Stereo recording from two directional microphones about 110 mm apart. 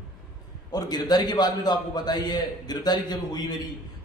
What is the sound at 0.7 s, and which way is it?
A man's voice, 35° left (ahead or behind).